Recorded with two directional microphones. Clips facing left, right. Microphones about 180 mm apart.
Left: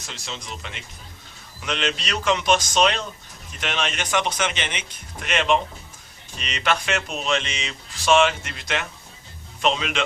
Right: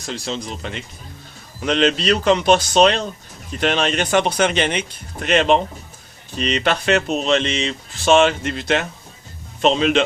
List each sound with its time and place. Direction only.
0.1 s a man's voice: 35° right (ahead or behind)